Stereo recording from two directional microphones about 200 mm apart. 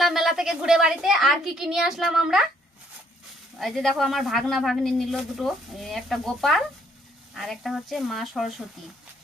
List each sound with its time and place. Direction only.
0.0 s speech: centre (ahead or behind)
3.6 s speech: centre (ahead or behind)